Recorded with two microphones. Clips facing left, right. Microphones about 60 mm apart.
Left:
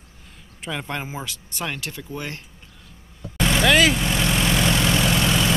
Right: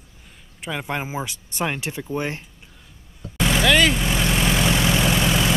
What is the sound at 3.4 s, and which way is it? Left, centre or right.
Vehicle, centre.